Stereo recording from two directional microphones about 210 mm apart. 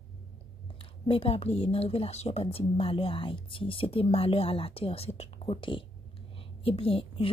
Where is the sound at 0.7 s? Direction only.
25° left (ahead or behind).